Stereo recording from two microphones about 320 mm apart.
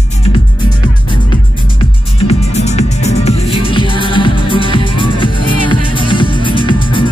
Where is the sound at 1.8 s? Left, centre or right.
Centre.